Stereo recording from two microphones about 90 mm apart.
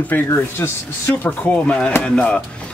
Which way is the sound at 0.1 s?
20° left (ahead or behind).